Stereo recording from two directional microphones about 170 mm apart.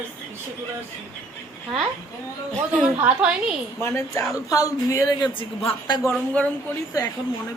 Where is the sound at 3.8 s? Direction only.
15° left (ahead or behind).